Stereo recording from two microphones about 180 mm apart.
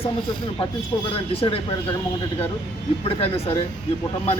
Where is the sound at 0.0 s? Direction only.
25° left (ahead or behind).